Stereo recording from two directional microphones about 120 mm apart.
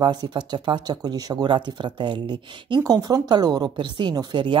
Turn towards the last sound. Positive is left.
turn(degrees=-40)  # may be behind; listen again after turning